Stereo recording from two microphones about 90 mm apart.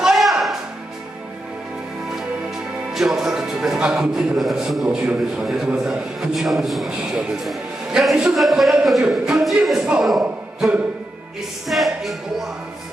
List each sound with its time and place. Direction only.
0.0 s music: centre (ahead or behind)
2.9 s a man's voice: 5° right (ahead or behind)
11.6 s a man's voice: centre (ahead or behind)